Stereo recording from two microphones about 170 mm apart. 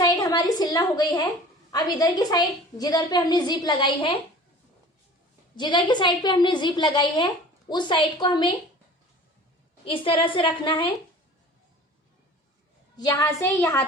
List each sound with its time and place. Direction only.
0.0 s a sound: 20° left (ahead or behind)
1.7 s a woman's voice: 25° left (ahead or behind)
5.5 s a woman's voice: 25° left (ahead or behind)
9.8 s a woman's voice: 30° left (ahead or behind)
13.0 s a woman's voice: 20° left (ahead or behind)